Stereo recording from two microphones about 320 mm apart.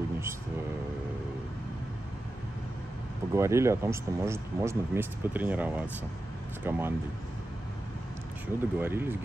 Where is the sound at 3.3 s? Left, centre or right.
Centre.